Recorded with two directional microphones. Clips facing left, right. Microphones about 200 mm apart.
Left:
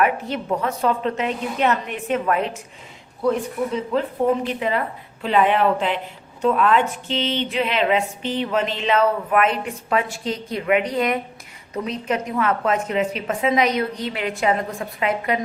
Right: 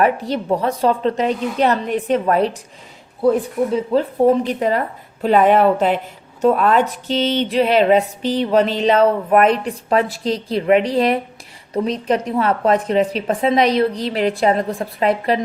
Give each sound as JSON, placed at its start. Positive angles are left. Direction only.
{"t": 0.0, "sound": "a woman's voice", "side_deg": -35}
{"t": 3.9, "sound": "a woman's voice", "side_deg": -35}